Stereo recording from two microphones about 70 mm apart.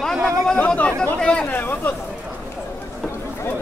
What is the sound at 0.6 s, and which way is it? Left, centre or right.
Chatter, centre.